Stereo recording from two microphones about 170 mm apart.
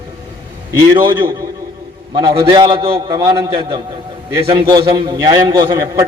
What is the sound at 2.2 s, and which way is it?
A man's voice, 30° right (ahead or behind).